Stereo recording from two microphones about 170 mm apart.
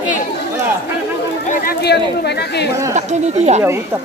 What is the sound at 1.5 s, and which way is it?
Speech, 65° left (ahead or behind).